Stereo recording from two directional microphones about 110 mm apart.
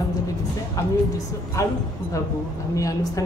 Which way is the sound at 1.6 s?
25° left (ahead or behind).